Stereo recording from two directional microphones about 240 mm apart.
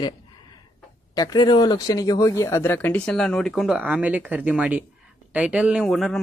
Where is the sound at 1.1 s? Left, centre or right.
Centre.